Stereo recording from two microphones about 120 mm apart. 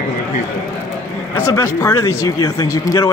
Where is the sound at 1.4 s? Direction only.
25° left (ahead or behind).